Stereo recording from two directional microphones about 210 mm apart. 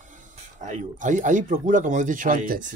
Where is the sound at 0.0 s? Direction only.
35° right (ahead or behind).